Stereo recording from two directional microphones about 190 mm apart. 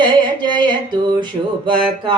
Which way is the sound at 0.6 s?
25° right (ahead or behind).